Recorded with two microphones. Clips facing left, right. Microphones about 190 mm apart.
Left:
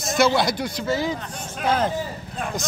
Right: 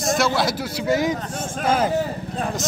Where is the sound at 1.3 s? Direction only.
45° right (ahead or behind).